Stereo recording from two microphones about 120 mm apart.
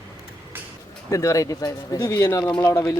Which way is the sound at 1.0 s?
25° left (ahead or behind).